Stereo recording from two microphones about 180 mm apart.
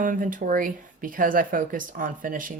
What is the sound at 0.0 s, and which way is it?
A woman's voice, 50° right (ahead or behind).